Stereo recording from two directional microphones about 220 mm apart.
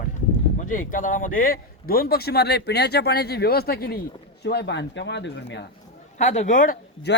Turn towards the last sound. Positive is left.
turn(degrees=40)  # may be behind; listen again after turning